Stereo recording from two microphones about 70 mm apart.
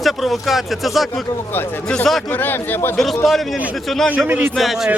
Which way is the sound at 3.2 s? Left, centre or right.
Centre.